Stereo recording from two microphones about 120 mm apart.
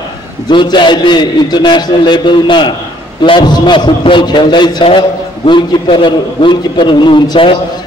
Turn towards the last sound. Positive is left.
turn(degrees=40)  # may be behind; listen again after turning